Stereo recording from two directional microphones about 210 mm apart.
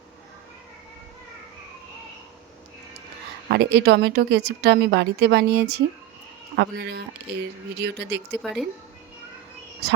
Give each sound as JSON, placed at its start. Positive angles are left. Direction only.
{"t": 3.5, "sound": "speech", "side_deg": -55}
{"t": 8.4, "sound": "speech", "side_deg": 0}